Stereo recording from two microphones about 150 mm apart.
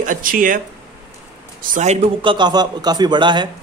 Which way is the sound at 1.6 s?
60° right (ahead or behind).